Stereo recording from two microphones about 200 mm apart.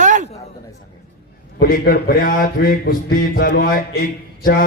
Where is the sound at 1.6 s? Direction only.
50° left (ahead or behind).